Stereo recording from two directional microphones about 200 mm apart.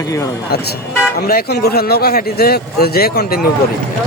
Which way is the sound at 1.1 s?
50° left (ahead or behind).